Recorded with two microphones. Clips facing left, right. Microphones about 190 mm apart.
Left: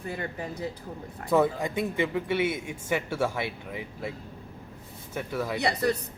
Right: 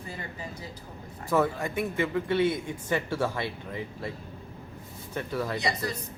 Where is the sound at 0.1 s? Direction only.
60° left (ahead or behind).